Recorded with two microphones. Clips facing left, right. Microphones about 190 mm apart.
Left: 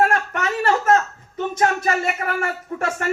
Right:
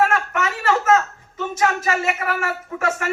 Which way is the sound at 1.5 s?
35° left (ahead or behind).